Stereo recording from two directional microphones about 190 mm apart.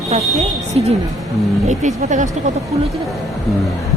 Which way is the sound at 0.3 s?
35° right (ahead or behind).